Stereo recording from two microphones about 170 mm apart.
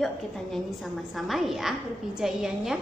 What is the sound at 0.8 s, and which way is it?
A woman's voice, centre (ahead or behind).